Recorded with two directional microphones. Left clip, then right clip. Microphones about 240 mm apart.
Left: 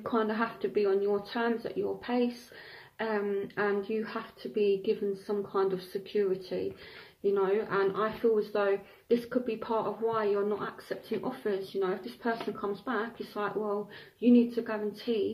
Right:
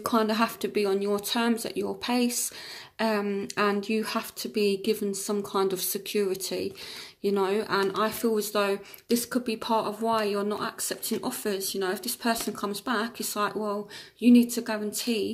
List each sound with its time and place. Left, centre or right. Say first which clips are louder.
0.0 s speech: right 5 dB; right